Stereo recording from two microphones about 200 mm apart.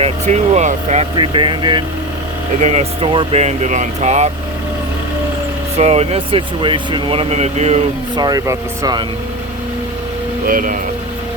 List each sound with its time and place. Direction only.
0.0 s speech: 35° right (ahead or behind)
1.1 s speech: 25° right (ahead or behind)
5.7 s speech: 30° right (ahead or behind)
8.1 s speech: 20° right (ahead or behind)
10.4 s speech: 45° right (ahead or behind)